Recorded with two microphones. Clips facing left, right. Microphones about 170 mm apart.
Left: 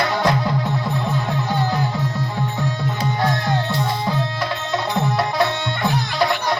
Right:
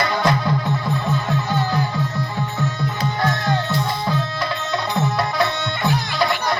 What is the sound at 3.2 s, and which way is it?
Music, 15° left (ahead or behind).